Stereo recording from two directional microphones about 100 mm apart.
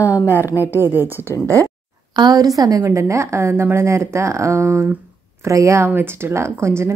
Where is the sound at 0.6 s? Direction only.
20° right (ahead or behind).